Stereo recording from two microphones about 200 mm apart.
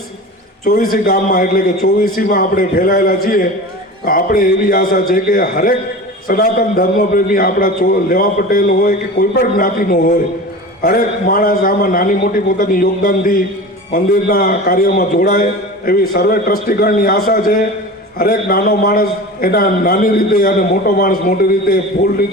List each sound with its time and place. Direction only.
0.6 s a man's voice: 45° left (ahead or behind)